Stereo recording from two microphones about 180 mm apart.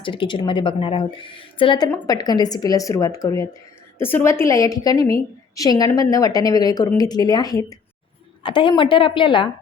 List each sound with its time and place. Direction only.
0.0 s a woman's voice: 30° left (ahead or behind)